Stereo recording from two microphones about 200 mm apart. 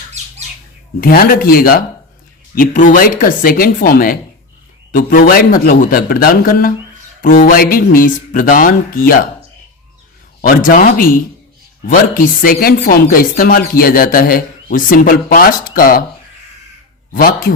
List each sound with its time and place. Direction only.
1.0 s speech: 45° left (ahead or behind)
10.4 s speech: 45° left (ahead or behind)
17.1 s speech: 45° left (ahead or behind)